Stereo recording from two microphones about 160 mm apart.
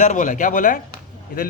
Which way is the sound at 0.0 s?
50° left (ahead or behind).